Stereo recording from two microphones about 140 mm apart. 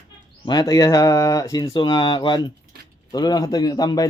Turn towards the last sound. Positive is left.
turn(degrees=30)  # may be behind; listen again after turning